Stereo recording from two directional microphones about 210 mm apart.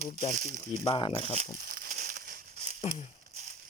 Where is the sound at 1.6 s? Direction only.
45° right (ahead or behind).